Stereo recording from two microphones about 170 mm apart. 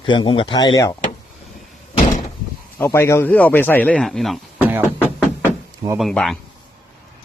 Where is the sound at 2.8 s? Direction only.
15° left (ahead or behind).